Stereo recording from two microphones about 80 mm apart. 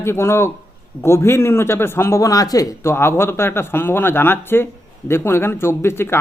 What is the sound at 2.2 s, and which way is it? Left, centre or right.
Speech, left.